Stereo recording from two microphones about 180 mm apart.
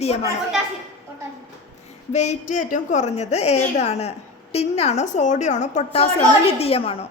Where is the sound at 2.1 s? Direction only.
40° left (ahead or behind).